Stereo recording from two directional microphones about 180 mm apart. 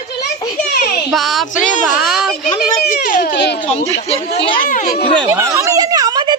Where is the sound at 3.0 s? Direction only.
50° left (ahead or behind).